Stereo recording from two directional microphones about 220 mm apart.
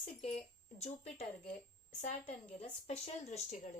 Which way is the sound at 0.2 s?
30° left (ahead or behind).